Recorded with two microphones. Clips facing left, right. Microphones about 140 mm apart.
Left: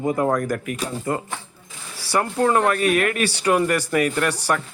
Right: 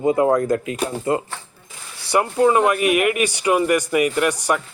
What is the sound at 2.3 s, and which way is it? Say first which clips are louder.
Speech: right 3 dB; 10° right (ahead or behind).